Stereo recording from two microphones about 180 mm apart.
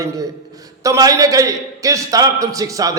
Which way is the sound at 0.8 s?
20° right (ahead or behind).